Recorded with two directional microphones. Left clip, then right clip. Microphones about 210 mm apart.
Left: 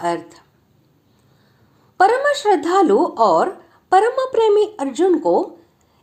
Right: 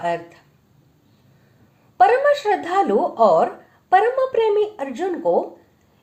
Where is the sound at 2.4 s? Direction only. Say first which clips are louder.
Left 4 dB; 30° left (ahead or behind).